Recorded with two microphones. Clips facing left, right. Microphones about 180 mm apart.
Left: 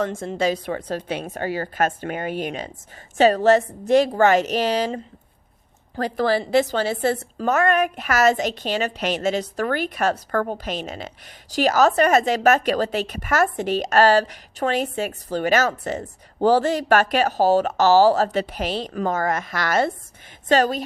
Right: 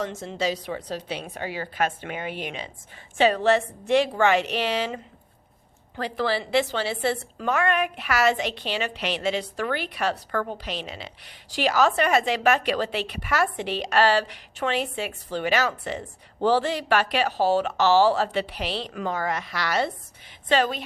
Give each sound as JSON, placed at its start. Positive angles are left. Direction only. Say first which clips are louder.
{"t": 0.0, "sound": "a woman's voice", "louder": "left 5 dB", "side_deg": 50}
{"t": 6.0, "sound": "a woman's voice", "louder": "left 5 dB", "side_deg": 45}